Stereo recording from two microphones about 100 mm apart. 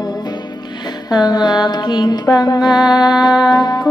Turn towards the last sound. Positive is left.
turn(degrees=45)  # may be behind; listen again after turning